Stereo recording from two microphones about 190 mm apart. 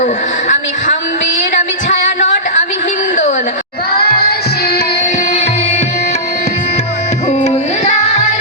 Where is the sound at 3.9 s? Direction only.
55° left (ahead or behind).